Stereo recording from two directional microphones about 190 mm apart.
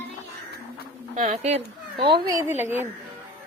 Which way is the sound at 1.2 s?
35° right (ahead or behind).